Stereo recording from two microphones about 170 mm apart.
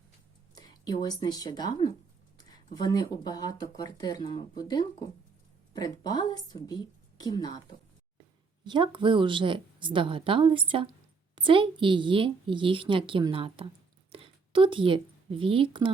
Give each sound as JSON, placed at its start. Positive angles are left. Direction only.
{"t": 0.5, "sound": "a sound", "side_deg": 25}
{"t": 1.0, "sound": "speech", "side_deg": 25}
{"t": 8.6, "sound": "a woman's voice", "side_deg": -25}